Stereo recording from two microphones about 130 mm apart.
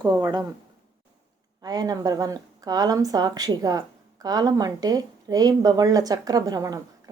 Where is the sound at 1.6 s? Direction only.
30° right (ahead or behind).